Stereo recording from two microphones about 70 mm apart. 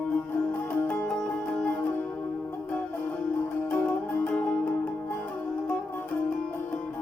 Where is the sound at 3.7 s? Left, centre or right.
Centre.